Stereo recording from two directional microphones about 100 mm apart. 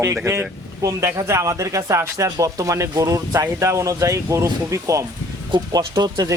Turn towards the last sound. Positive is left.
turn(degrees=-45)  # may be behind; listen again after turning